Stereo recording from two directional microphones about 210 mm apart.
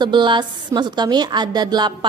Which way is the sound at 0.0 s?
20° right (ahead or behind).